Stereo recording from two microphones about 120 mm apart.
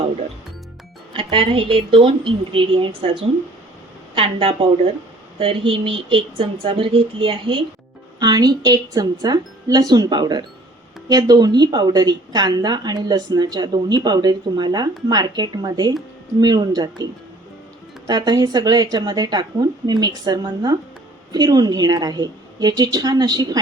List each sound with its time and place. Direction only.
1.1 s speech: 45° right (ahead or behind)
8.2 s a woman's voice: 35° right (ahead or behind)
18.1 s a woman's voice: 30° right (ahead or behind)